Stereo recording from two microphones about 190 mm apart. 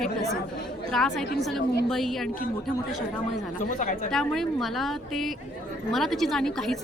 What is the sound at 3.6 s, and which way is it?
Speech, 40° left (ahead or behind).